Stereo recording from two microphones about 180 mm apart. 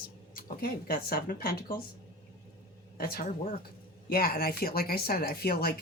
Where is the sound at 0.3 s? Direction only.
55° left (ahead or behind).